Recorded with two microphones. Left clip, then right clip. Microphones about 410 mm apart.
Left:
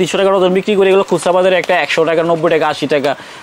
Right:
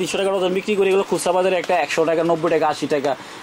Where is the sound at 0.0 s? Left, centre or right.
Left.